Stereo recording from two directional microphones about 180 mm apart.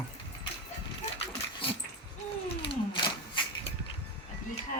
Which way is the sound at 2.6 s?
30° left (ahead or behind).